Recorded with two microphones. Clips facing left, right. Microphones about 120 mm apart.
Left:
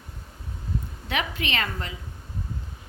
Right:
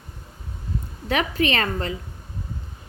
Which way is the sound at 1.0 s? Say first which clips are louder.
Right 8 dB; 40° right (ahead or behind).